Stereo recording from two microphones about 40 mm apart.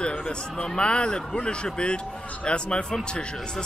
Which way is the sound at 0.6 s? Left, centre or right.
Left.